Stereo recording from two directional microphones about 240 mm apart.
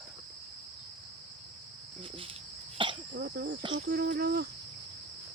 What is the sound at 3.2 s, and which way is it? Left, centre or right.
Cricket, right.